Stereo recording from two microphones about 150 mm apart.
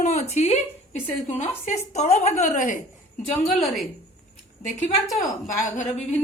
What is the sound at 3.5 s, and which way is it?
Speech, centre (ahead or behind).